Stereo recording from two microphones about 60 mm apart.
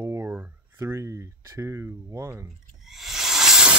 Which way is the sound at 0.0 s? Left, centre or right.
Right.